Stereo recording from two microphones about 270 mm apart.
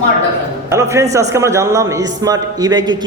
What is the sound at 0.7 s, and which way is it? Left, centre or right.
A man's voice, centre.